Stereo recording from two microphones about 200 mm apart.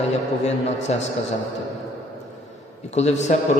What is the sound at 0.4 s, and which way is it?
Speech, 35° left (ahead or behind).